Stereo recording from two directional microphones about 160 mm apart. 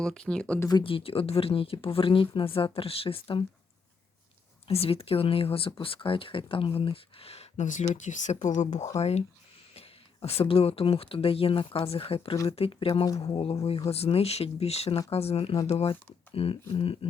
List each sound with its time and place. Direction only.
0.0 s speech: 5° left (ahead or behind)
0.7 s speech: 30° left (ahead or behind)
4.7 s speech: 40° left (ahead or behind)
10.2 s speech: 35° left (ahead or behind)